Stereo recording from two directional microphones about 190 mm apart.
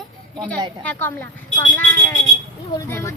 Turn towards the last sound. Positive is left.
turn(degrees=15)  # may be behind; listen again after turning